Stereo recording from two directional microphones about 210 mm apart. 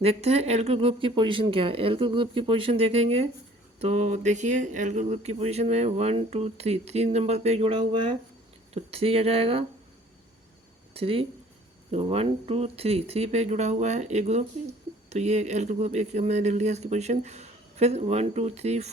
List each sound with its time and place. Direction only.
0.0 s speech: 30° right (ahead or behind)
10.9 s speech: 25° right (ahead or behind)